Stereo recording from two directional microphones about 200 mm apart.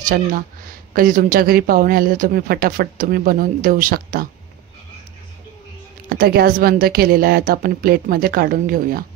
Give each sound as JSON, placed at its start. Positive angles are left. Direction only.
{"t": 0.0, "sound": "speech", "side_deg": -45}
{"t": 6.0, "sound": "speech", "side_deg": -50}